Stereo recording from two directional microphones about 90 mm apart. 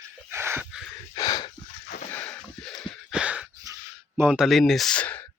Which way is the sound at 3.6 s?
40° right (ahead or behind).